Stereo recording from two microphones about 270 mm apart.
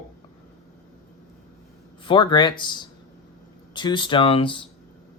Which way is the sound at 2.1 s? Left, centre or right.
Centre.